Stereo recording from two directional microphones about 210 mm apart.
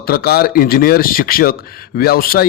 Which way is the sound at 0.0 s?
45° left (ahead or behind).